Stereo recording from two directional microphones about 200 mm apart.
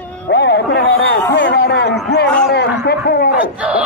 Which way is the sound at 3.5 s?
5° right (ahead or behind).